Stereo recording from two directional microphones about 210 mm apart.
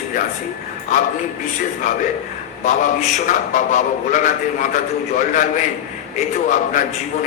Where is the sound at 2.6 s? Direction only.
35° left (ahead or behind).